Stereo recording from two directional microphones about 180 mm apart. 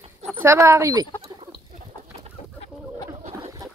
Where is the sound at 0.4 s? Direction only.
15° right (ahead or behind).